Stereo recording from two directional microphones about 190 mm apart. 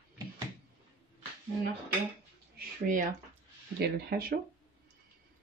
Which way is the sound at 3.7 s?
55° right (ahead or behind).